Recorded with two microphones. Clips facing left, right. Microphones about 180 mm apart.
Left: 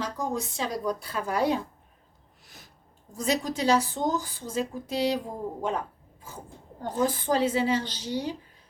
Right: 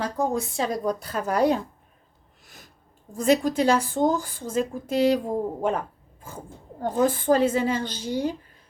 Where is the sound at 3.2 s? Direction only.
55° right (ahead or behind).